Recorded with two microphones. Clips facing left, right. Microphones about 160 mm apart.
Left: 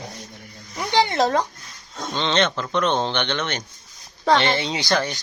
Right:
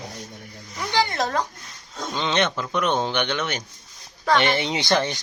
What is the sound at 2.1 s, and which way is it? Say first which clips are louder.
Speech: left 2 dB; 5° right (ahead or behind).